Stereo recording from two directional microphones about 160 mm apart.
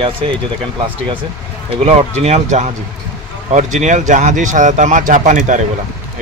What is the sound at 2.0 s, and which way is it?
Speech, 40° right (ahead or behind).